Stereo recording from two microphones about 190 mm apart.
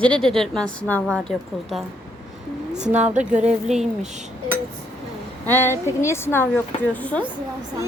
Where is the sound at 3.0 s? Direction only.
40° right (ahead or behind).